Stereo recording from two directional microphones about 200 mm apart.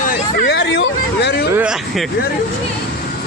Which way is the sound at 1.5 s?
5° right (ahead or behind).